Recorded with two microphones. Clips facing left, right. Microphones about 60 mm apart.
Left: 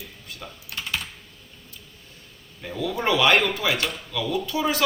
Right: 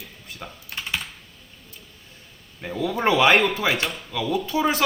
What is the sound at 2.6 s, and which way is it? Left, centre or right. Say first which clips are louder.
A man's voice: right 2 dB; right.